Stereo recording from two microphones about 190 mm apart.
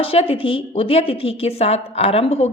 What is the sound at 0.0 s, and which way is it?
A woman's voice, 30° left (ahead or behind).